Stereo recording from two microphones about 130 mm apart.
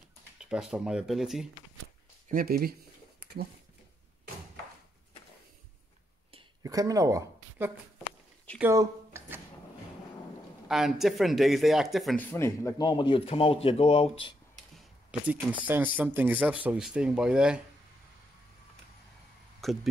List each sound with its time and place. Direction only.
0.4 s speech: 5° right (ahead or behind)
2.3 s speech: 90° right
6.6 s a woman's voice: 25° right (ahead or behind)
8.7 s a sound: 20° right (ahead or behind)
10.7 s speech: centre (ahead or behind)
12.2 s speech: 15° left (ahead or behind)
12.8 s speech: 40° left (ahead or behind)
15.1 s speech: 5° right (ahead or behind)
19.6 s speech: centre (ahead or behind)